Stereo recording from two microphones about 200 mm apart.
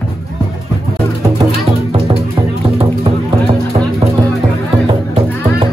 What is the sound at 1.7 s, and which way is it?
Music, 30° right (ahead or behind).